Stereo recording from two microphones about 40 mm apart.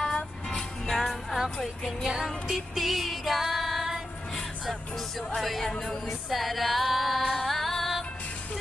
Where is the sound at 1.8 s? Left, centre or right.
Centre.